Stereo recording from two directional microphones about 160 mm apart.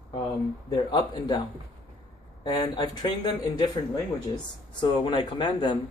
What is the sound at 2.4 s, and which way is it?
Speech, 25° left (ahead or behind).